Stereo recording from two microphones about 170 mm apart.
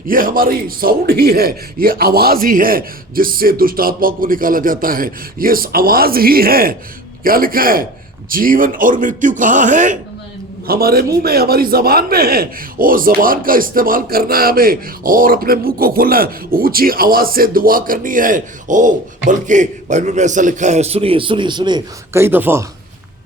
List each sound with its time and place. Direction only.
0.1 s a man's voice: 55° right (ahead or behind)
10.7 s a man's voice: 65° right (ahead or behind); by 22.2 s 25° right (ahead or behind)
22.2 s speech: 10° right (ahead or behind)